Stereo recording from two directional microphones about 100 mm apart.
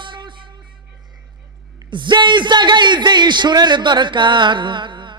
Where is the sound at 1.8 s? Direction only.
50° right (ahead or behind).